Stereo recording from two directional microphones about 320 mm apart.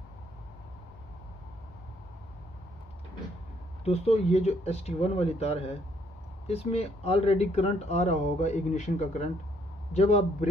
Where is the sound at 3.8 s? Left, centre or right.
Centre.